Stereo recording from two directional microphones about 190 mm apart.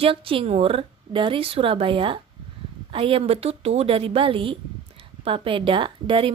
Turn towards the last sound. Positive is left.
turn(degrees=-25)  # may be behind; listen again after turning